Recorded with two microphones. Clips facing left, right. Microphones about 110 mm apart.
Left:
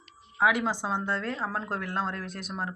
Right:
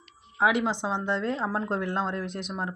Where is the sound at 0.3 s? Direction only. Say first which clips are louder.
Right 1 dB; 20° right (ahead or behind).